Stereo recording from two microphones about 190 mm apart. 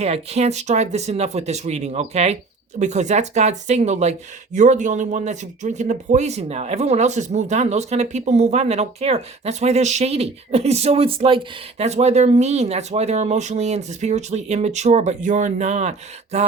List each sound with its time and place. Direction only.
0.0 s speech: 35° right (ahead or behind)